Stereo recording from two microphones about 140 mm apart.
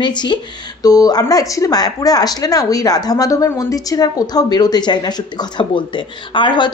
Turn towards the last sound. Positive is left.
turn(degrees=35)  # may be behind; listen again after turning